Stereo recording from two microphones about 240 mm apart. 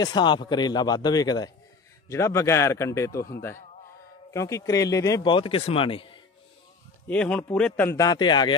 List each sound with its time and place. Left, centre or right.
0.0 s a man's voice: centre
7.1 s a man's voice: centre